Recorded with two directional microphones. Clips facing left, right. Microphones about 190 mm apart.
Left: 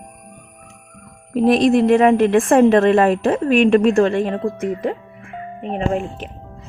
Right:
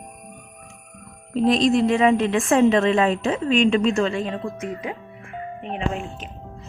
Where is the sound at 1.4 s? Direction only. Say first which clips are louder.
Left 4 dB; 55° left (ahead or behind).